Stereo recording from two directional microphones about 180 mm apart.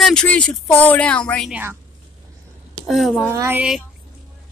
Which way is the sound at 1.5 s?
10° right (ahead or behind).